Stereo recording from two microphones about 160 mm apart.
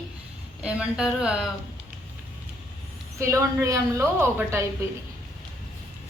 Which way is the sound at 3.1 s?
20° right (ahead or behind).